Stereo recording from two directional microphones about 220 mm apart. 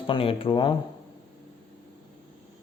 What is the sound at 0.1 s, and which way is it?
Speech, 25° left (ahead or behind).